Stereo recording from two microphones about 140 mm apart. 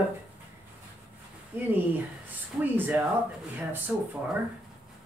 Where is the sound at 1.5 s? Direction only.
15° right (ahead or behind).